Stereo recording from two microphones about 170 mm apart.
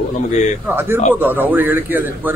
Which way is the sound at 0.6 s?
15° right (ahead or behind).